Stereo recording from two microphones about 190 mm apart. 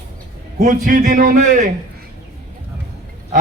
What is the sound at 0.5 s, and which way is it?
A man's voice, 45° right (ahead or behind).